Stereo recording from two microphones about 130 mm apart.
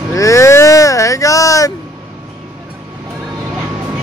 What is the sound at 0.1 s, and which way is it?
Vehicle, 25° left (ahead or behind).